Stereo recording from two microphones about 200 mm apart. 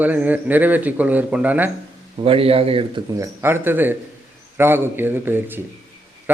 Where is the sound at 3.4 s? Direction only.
10° right (ahead or behind).